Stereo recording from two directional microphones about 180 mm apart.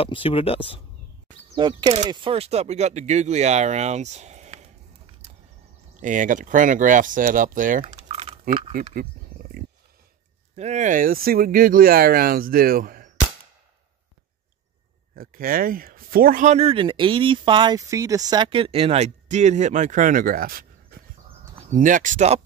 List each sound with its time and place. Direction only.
0.0 s speech: 30° left (ahead or behind)
1.5 s speech: 25° right (ahead or behind); by 4.6 s 40° right (ahead or behind)
5.9 s speech: 45° right (ahead or behind)
7.8 s typing: 35° right (ahead or behind)
9.3 s pig: 10° right (ahead or behind)
10.5 s speech: 40° right (ahead or behind); by 13.1 s 55° right (ahead or behind)
15.1 s speech: 50° right (ahead or behind)
21.6 s speech: 45° right (ahead or behind)